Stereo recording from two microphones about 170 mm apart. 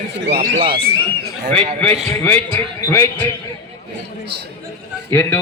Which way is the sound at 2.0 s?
5° left (ahead or behind).